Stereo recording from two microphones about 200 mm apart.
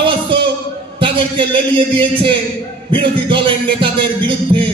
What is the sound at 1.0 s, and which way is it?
A man's voice, 25° right (ahead or behind).